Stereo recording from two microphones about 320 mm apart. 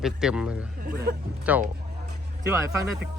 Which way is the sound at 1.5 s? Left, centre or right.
Centre.